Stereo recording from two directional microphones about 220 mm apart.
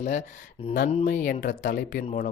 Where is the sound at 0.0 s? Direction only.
30° left (ahead or behind).